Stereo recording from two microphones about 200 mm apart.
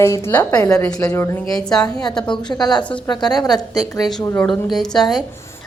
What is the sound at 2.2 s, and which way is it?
Speech, 20° left (ahead or behind).